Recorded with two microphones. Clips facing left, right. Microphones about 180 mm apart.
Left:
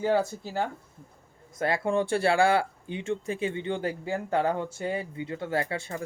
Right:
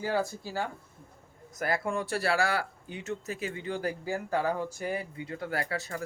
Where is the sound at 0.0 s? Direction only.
20° left (ahead or behind).